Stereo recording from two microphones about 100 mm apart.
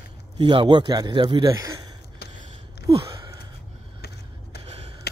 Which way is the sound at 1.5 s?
30° right (ahead or behind).